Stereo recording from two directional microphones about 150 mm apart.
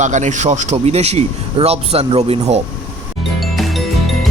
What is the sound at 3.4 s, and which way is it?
Music, centre (ahead or behind).